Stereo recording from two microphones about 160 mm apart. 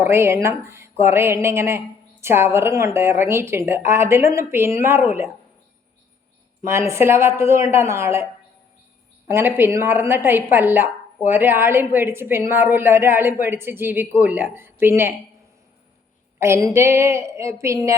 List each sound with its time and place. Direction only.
0.0 s speech: 15° right (ahead or behind)
6.7 s speech: 15° right (ahead or behind)
16.4 s speech: 20° right (ahead or behind)